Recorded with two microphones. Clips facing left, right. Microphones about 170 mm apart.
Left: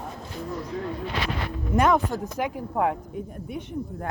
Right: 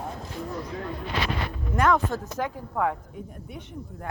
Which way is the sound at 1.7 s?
15° left (ahead or behind).